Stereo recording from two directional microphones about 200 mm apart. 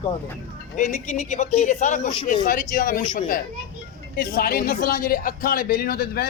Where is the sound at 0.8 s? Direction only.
35° left (ahead or behind).